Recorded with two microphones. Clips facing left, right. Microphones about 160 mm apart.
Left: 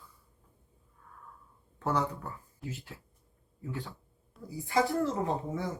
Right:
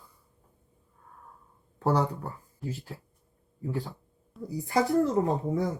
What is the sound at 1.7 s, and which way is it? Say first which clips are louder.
Speech: right 5 dB; 35° right (ahead or behind).